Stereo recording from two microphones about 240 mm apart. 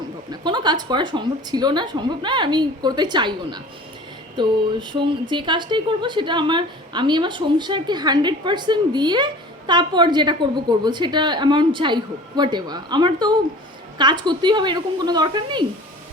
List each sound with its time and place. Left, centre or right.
0.3 s a woman's voice: centre